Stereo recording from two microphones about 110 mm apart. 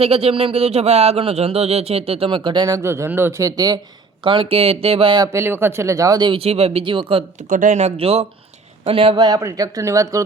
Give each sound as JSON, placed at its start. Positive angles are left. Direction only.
{"t": 0.0, "sound": "speech", "side_deg": -65}
{"t": 2.7, "sound": "speech", "side_deg": -25}
{"t": 4.2, "sound": "speech", "side_deg": -50}
{"t": 5.2, "sound": "speech", "side_deg": -25}
{"t": 6.3, "sound": "speech", "side_deg": -65}
{"t": 7.7, "sound": "speech", "side_deg": -85}
{"t": 9.3, "sound": "speech", "side_deg": -35}